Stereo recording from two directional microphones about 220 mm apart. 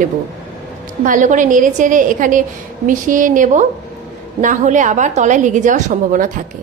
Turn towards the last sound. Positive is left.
turn(degrees=-35)  # may be behind; listen again after turning